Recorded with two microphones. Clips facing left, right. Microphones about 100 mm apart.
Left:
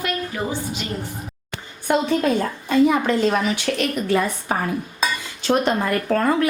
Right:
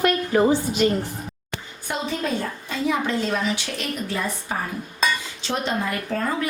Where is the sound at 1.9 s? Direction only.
55° left (ahead or behind).